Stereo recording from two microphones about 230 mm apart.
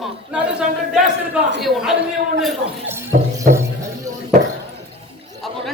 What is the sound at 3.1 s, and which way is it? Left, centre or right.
Music, right.